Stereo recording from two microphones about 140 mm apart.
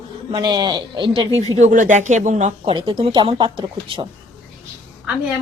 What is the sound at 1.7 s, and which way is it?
Speech, 65° right (ahead or behind).